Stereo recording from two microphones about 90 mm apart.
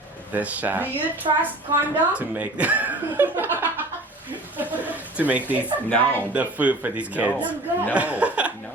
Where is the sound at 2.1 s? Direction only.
15° right (ahead or behind).